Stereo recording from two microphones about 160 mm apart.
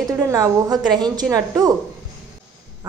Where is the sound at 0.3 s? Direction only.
25° right (ahead or behind).